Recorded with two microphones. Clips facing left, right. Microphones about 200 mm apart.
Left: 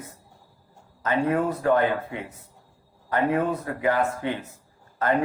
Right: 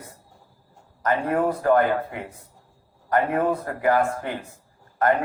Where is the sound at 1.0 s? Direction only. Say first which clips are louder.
Right 1 dB; 45° right (ahead or behind).